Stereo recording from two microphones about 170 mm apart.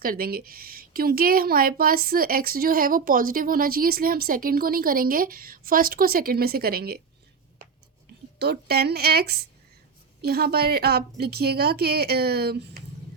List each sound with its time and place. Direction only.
0.0 s a woman's voice: 60° right (ahead or behind)
8.4 s a woman's voice: 70° right (ahead or behind)